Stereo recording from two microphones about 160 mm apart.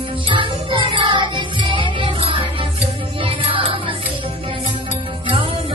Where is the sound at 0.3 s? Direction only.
30° right (ahead or behind).